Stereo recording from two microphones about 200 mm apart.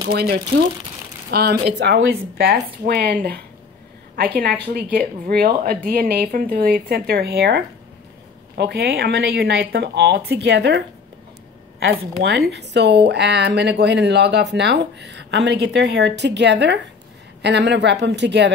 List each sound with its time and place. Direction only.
0.1 s speech: 50° right (ahead or behind)
12.2 s speech: 60° right (ahead or behind)